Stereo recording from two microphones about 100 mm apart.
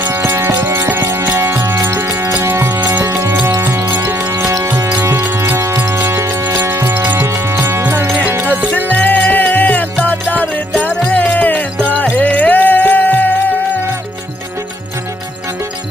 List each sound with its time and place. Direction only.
0.0 s music: 25° right (ahead or behind)
8.9 s music: 15° left (ahead or behind)